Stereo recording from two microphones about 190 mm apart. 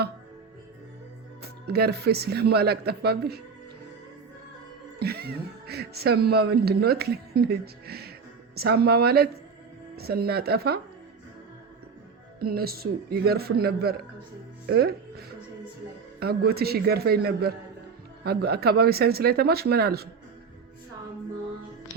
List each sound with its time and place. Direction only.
1.4 s music: 55° right (ahead or behind)
4.9 s music: 55° right (ahead or behind)
12.4 s a man's voice: 55° right (ahead or behind)
16.2 s music: 55° right (ahead or behind)